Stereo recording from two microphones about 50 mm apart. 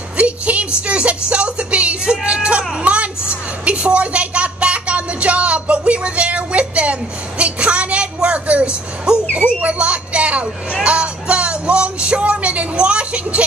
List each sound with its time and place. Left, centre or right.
0.2 s a sound: right
10.8 s music: right
12.7 s vehicle: right